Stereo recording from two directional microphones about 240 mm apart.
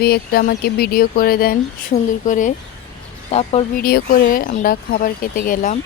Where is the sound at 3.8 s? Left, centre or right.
Left.